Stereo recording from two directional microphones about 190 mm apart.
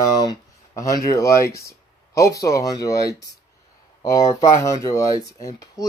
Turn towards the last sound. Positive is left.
turn(degrees=20)  # may be behind; listen again after turning